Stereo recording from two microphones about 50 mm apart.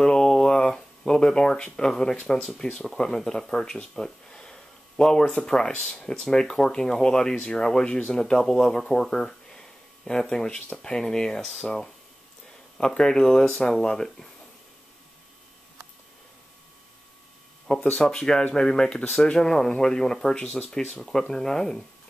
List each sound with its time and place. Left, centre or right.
0.0 s a sound: centre
2.2 s speech: centre
17.9 s speech: centre
20.3 s speech: left
21.0 s speech: centre